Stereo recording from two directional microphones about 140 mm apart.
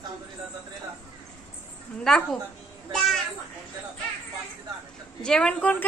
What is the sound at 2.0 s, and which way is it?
Speech, 5° left (ahead or behind).